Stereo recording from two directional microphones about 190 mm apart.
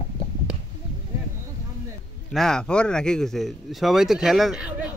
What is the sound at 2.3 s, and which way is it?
Speech, 5° left (ahead or behind).